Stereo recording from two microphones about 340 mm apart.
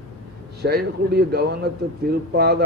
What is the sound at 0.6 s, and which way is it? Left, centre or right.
A man's voice, right.